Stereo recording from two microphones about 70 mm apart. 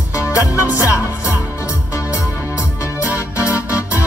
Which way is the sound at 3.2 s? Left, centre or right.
Left.